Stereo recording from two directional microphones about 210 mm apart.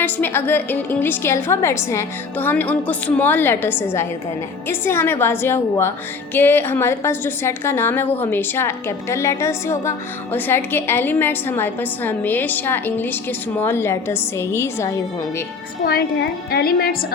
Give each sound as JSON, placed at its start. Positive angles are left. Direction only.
{"t": 0.0, "sound": "a woman's voice", "side_deg": 10}
{"t": 15.8, "sound": "a woman's voice", "side_deg": 45}